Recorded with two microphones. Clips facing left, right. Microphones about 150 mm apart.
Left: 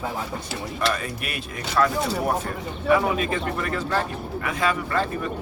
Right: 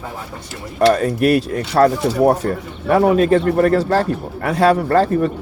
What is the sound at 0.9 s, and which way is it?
Speech, 40° right (ahead or behind).